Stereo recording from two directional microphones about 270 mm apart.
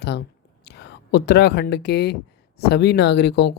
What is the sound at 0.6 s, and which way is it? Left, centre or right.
Speech, left.